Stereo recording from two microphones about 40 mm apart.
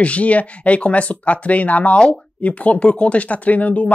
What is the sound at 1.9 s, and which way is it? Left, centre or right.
Speech, centre.